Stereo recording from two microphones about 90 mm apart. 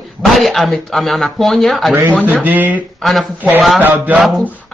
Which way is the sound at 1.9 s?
20° right (ahead or behind).